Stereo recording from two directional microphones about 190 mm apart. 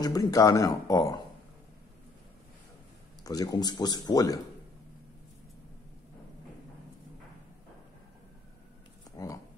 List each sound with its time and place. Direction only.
0.0 s speech: 20° left (ahead or behind)
3.3 s speech: 20° left (ahead or behind)
9.1 s a sound: 20° left (ahead or behind)